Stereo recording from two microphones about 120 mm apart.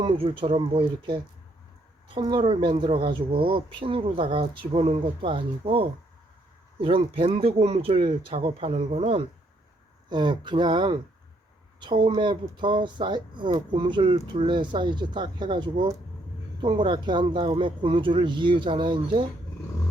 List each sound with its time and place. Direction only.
0.0 s speech: 50° right (ahead or behind)
10.1 s speech: 40° right (ahead or behind)